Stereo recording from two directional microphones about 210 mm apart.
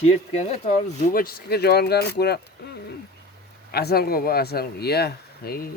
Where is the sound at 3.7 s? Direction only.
50° left (ahead or behind).